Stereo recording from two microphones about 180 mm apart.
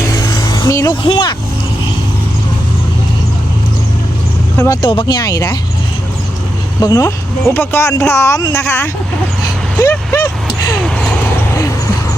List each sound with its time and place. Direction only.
0.0 s vehicle: 20° left (ahead or behind)
1.0 s speech: 25° left (ahead or behind)
4.5 s speech: 15° left (ahead or behind)
4.8 s speech: 25° left (ahead or behind)
6.8 s speech: 15° left (ahead or behind)